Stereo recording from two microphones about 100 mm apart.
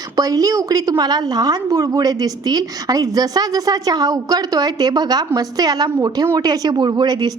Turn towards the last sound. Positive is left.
turn(degrees=-45)  # may be behind; listen again after turning